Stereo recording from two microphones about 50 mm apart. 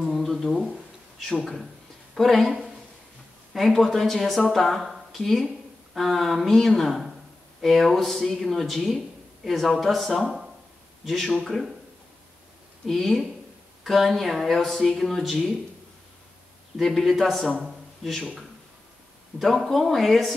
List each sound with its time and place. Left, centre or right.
0.0 s a sound: centre
1.4 s speech: centre
3.5 s speech: centre
10.2 s speech: centre
11.1 s speech: centre
12.8 s speech: centre
16.8 s speech: centre
19.3 s speech: centre